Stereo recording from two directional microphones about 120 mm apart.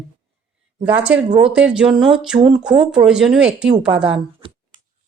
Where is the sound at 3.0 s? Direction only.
5° right (ahead or behind).